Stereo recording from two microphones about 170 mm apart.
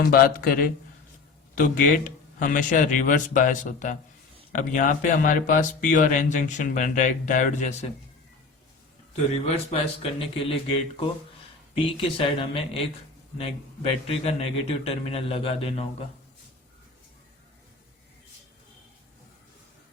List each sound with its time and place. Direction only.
0.1 s a man's voice: 60° left (ahead or behind)
9.6 s a man's voice: 35° left (ahead or behind)
14.1 s a man's voice: 35° left (ahead or behind)